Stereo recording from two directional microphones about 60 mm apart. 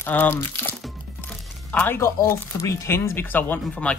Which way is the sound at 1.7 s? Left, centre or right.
Left.